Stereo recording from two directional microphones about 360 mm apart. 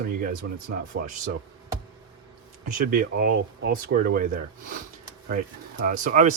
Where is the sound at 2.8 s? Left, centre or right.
Right.